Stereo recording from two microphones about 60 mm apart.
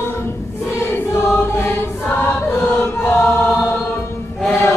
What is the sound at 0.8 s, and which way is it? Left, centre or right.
Choir, left.